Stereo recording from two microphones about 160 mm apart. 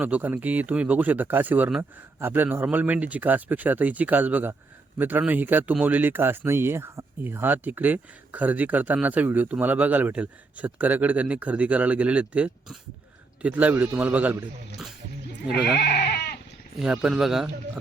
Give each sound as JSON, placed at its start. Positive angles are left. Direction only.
{"t": 0.0, "sound": "speech", "side_deg": -10}
{"t": 15.6, "sound": "goat", "side_deg": 85}
{"t": 16.8, "sound": "speech", "side_deg": -5}